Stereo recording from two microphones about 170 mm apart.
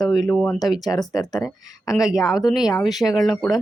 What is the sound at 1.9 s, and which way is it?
Speech, centre (ahead or behind).